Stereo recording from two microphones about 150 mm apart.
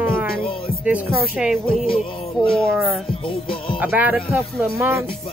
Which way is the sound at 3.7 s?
10° right (ahead or behind).